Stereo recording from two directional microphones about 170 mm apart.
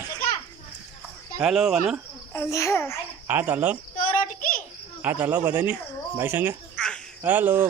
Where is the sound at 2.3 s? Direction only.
15° left (ahead or behind).